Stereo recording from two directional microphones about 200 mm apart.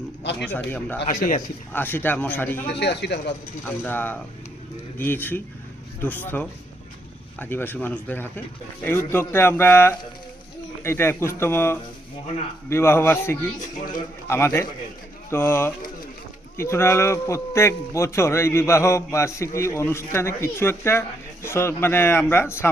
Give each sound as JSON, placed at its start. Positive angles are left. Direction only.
{"t": 0.2, "sound": "a sound", "side_deg": 60}
{"t": 1.0, "sound": "speech", "side_deg": 45}
{"t": 1.7, "sound": "a man's voice", "side_deg": 10}
{"t": 2.6, "sound": "speech", "side_deg": 55}
{"t": 3.7, "sound": "a man's voice", "side_deg": 10}
{"t": 13.6, "sound": "speech", "side_deg": 45}
{"t": 14.3, "sound": "a man's voice", "side_deg": 10}